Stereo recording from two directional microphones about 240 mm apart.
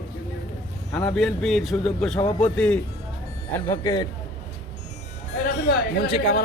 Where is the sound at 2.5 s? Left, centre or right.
Centre.